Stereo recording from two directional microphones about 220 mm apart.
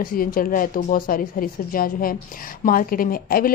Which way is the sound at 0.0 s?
40° left (ahead or behind).